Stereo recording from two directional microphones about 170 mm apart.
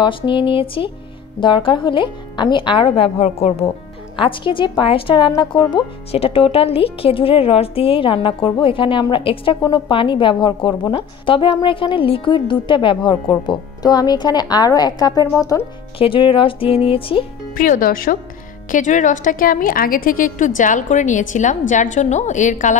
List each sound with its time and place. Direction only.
0.0 s speech: 30° left (ahead or behind)
16.0 s speech: 30° left (ahead or behind)
17.6 s a woman's voice: 55° left (ahead or behind)